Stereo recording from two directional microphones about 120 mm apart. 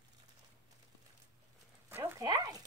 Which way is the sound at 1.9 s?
25° right (ahead or behind).